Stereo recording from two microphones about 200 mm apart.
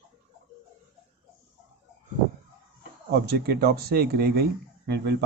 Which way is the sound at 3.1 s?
55° right (ahead or behind).